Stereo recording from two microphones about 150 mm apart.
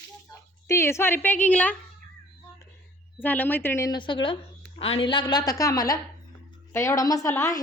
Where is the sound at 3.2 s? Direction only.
10° left (ahead or behind).